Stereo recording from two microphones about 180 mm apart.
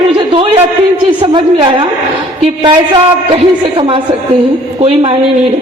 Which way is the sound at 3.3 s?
30° right (ahead or behind).